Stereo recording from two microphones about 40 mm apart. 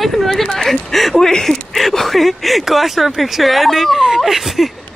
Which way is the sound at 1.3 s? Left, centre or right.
Centre.